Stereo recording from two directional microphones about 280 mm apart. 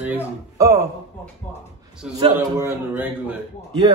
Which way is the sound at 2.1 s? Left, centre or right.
Centre.